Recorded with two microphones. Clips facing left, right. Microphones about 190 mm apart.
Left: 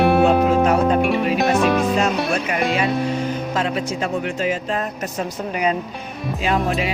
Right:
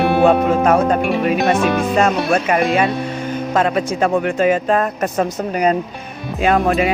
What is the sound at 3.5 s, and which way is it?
Speech, 55° right (ahead or behind).